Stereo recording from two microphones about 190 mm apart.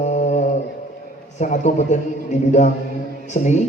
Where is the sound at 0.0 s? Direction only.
40° left (ahead or behind).